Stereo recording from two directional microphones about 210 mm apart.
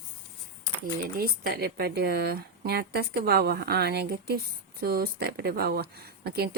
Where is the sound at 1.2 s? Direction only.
45° right (ahead or behind).